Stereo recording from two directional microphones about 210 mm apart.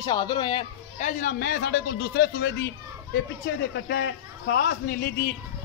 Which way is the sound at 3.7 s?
55° left (ahead or behind).